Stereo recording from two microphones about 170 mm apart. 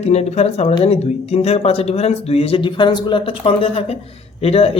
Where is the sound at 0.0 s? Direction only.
40° left (ahead or behind).